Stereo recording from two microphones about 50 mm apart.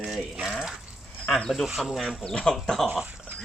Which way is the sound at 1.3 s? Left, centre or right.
Centre.